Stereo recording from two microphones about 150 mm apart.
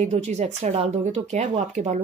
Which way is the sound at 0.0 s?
45° right (ahead or behind).